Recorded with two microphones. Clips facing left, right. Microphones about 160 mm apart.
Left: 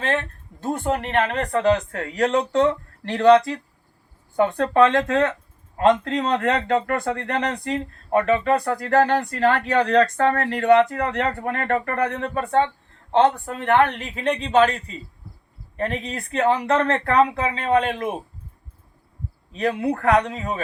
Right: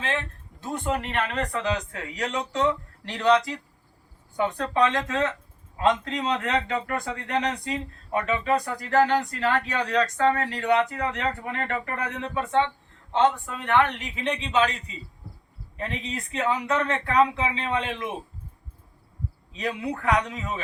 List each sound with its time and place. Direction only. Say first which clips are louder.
0.6 s speech: left 4 dB; 50° left (ahead or behind)
19.5 s speech: left 7 dB; 55° left (ahead or behind)